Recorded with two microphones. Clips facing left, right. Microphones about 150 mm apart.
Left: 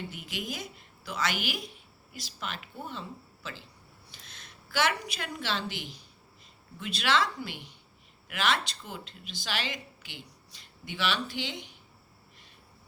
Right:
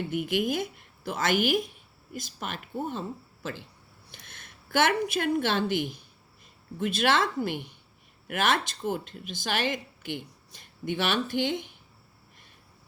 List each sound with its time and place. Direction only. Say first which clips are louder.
0.1 s a woman's voice: right 11 dB; 55° right (ahead or behind)